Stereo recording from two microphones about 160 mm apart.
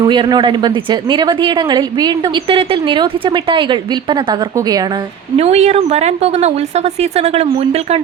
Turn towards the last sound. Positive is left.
turn(degrees=-40)  # may be behind; listen again after turning